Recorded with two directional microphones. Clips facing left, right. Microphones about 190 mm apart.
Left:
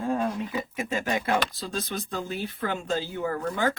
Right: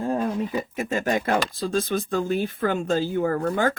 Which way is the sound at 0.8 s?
50° right (ahead or behind).